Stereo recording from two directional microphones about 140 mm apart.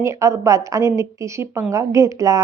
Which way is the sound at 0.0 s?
20° right (ahead or behind).